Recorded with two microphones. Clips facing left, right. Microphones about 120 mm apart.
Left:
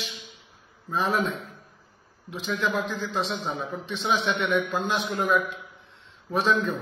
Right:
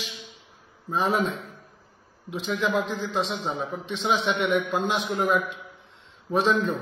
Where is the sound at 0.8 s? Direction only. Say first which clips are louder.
Right 1 dB; 10° right (ahead or behind).